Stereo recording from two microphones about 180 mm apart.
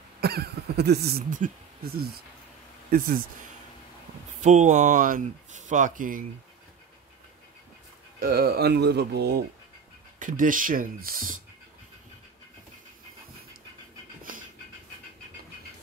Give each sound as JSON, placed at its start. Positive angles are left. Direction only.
{"t": 0.2, "sound": "a sound", "side_deg": -60}
{"t": 4.4, "sound": "speech", "side_deg": -40}
{"t": 8.2, "sound": "speech", "side_deg": -55}
{"t": 10.1, "sound": "speech", "side_deg": -45}